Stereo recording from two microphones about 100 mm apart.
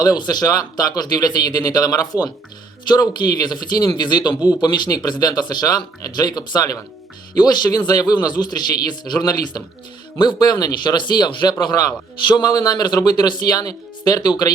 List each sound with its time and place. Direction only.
0.0 s a man's voice: 40° left (ahead or behind)